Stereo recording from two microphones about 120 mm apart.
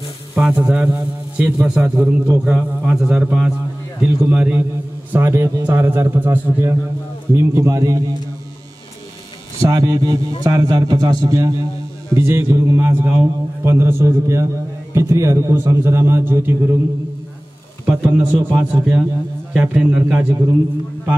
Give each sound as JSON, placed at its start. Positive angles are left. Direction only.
{"t": 0.3, "sound": "a man's voice", "side_deg": -5}
{"t": 5.1, "sound": "a man's voice", "side_deg": -20}
{"t": 9.6, "sound": "a man's voice", "side_deg": -30}
{"t": 17.8, "sound": "a man's voice", "side_deg": -10}